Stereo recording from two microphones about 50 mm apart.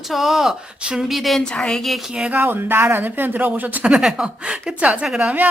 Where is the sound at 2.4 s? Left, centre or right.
Right.